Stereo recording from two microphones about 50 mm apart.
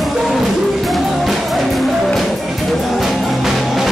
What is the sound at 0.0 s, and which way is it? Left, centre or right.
Music, centre.